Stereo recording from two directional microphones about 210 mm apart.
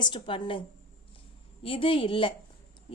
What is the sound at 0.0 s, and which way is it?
Speech, 25° left (ahead or behind).